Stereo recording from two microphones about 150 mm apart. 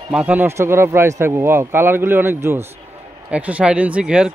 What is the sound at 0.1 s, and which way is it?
A man's voice, 10° right (ahead or behind).